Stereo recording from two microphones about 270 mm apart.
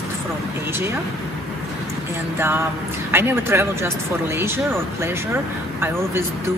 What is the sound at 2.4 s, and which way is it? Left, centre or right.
Speech, centre.